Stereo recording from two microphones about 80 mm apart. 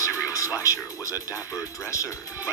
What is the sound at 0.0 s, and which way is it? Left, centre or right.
Music, left.